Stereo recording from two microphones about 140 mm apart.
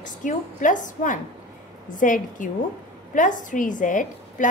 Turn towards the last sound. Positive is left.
turn(degrees=65)  # may be behind; listen again after turning